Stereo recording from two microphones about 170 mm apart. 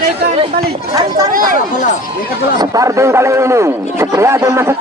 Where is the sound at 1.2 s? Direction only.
55° right (ahead or behind).